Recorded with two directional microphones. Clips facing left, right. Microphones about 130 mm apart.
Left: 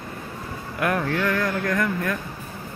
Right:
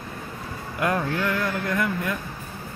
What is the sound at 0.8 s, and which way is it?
Speech, 20° right (ahead or behind).